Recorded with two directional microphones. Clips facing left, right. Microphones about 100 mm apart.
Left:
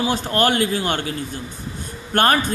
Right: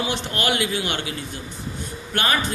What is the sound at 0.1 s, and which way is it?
Speech, 40° left (ahead or behind).